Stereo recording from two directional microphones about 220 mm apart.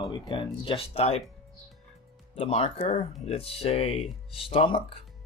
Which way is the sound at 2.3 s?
25° left (ahead or behind).